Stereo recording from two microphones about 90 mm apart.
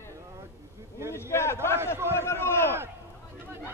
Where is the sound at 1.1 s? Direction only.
30° left (ahead or behind).